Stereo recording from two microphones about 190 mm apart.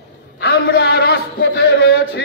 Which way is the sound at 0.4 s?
60° left (ahead or behind).